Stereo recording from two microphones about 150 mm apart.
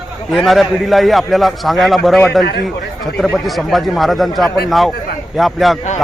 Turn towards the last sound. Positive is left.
turn(degrees=0)  # may be behind; listen again after turning